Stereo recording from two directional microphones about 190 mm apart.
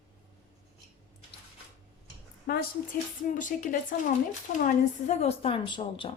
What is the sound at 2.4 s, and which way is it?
Speech, 55° left (ahead or behind).